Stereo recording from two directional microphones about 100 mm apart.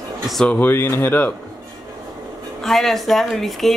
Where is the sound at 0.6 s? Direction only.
20° left (ahead or behind).